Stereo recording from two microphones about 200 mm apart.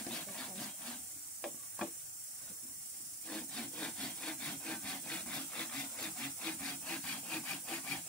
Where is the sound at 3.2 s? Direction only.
5° left (ahead or behind).